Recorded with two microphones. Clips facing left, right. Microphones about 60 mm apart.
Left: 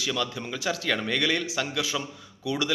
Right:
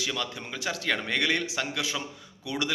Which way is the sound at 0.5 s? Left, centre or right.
Centre.